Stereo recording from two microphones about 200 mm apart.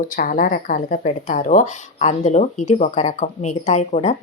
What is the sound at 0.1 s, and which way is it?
Speech, 40° left (ahead or behind).